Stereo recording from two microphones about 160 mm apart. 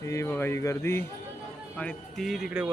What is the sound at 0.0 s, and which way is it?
A man's voice, 20° left (ahead or behind).